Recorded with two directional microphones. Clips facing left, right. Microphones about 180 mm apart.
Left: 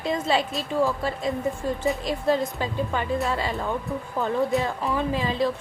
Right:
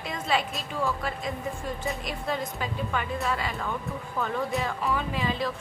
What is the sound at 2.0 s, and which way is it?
A woman's voice, 30° left (ahead or behind).